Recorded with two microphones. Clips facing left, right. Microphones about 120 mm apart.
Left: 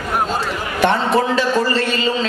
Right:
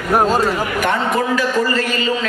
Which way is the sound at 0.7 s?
30° left (ahead or behind).